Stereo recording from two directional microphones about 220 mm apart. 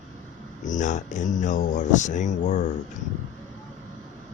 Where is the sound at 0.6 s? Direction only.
35° left (ahead or behind).